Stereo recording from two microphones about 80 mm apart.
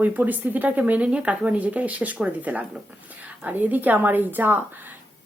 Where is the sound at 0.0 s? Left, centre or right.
Right.